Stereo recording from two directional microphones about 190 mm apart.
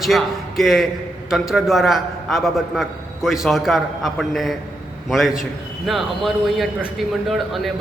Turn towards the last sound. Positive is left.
turn(degrees=0)  # may be behind; listen again after turning